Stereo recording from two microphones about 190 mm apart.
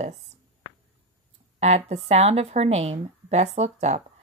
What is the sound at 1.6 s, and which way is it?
Speech, 35° right (ahead or behind).